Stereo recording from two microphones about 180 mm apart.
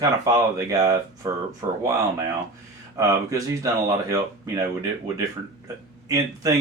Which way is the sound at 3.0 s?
20° right (ahead or behind).